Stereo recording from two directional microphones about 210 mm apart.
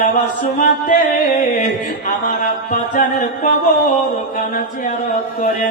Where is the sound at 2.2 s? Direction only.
40° left (ahead or behind).